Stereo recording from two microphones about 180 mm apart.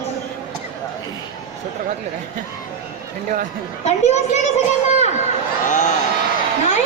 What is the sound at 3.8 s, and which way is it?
A woman's voice, 40° left (ahead or behind).